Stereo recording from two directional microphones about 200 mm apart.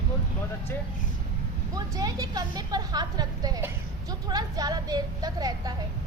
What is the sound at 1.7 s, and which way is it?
A woman's voice, 20° right (ahead or behind).